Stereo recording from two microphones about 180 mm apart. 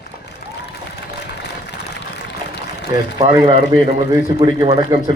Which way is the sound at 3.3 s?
25° right (ahead or behind).